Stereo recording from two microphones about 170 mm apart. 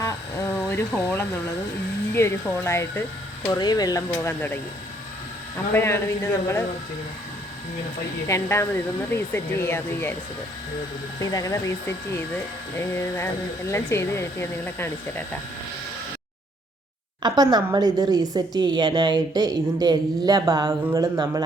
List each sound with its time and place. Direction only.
0.0 s a sound: 15° left (ahead or behind)
2.1 s speech: 15° left (ahead or behind)
4.1 s speech: 10° left (ahead or behind)
5.7 s speech: 15° left (ahead or behind)
8.3 s speech: 15° left (ahead or behind)
11.2 s speech: 20° left (ahead or behind)
17.2 s a woman's voice: 25° right (ahead or behind)